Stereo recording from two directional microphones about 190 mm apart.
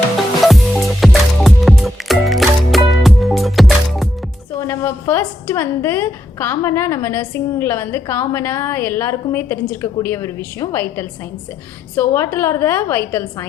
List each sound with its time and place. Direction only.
0.4 s music: centre (ahead or behind)
4.6 s a woman's voice: 15° left (ahead or behind)